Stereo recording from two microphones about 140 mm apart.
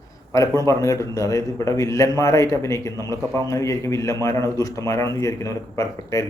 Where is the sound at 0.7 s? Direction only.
25° left (ahead or behind).